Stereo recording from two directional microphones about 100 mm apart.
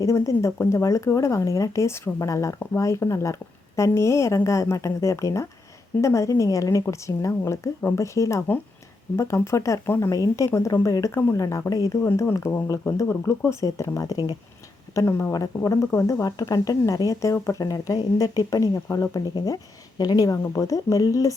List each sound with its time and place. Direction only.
0.0 s speech: 30° left (ahead or behind)